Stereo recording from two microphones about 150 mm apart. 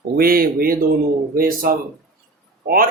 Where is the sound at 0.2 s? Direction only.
80° right.